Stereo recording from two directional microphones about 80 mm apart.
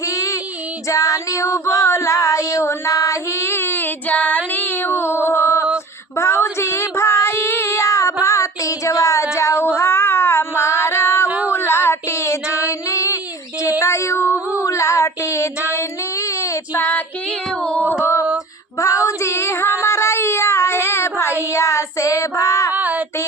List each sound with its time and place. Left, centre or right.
0.0 s child singing: left
0.9 s female singing: left
4.5 s cat: left
6.1 s child singing: left
11.3 s a sound: centre
11.5 s child singing: left
13.6 s female singing: left
14.6 s child singing: left
16.7 s child singing: left
18.0 s a sound: left
18.8 s child singing: left
22.7 s child singing: right